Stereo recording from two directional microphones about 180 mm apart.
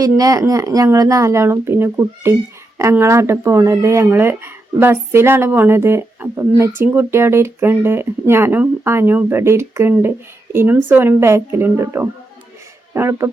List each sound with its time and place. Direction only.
0.2 s speech: 20° right (ahead or behind)